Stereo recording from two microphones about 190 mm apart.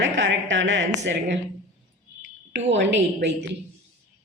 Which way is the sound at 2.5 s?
65° right (ahead or behind).